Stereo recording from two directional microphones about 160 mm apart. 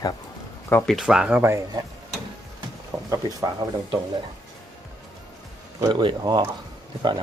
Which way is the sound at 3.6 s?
20° right (ahead or behind).